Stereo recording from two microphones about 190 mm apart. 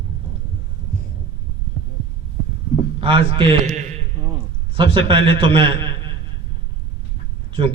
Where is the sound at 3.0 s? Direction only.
30° right (ahead or behind).